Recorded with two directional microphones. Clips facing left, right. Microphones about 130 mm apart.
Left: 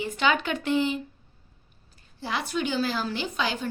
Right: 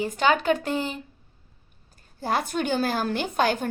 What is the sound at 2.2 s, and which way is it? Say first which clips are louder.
A woman's voice: right 3 dB; 45° right (ahead or behind).